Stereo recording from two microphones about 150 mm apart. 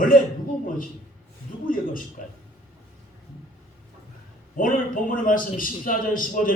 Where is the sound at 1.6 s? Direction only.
65° left (ahead or behind).